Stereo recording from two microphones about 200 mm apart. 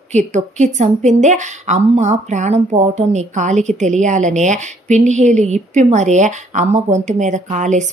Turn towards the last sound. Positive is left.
turn(degrees=-35)  # may be behind; listen again after turning